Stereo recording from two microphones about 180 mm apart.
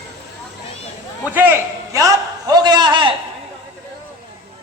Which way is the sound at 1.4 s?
15° right (ahead or behind).